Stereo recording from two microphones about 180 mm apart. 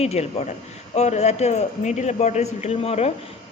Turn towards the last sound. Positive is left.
turn(degrees=35)  # may be behind; listen again after turning